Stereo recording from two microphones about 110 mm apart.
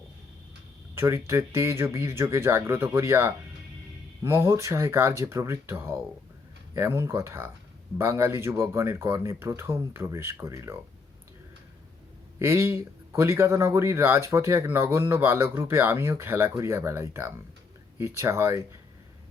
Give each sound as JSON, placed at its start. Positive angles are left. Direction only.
{"t": 0.9, "sound": "speech", "side_deg": -25}
{"t": 12.4, "sound": "speech", "side_deg": -20}